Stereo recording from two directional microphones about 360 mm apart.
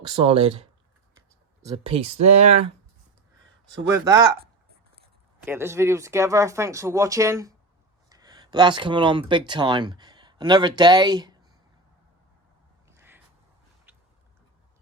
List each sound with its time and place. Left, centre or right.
0.0 s speech: centre
3.8 s speech: centre
5.5 s speech: centre
12.9 s a sound: centre